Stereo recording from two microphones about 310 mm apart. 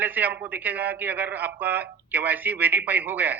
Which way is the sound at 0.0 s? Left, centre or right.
Centre.